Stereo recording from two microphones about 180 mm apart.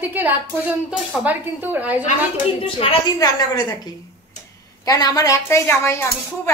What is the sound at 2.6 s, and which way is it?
Speech, 30° left (ahead or behind).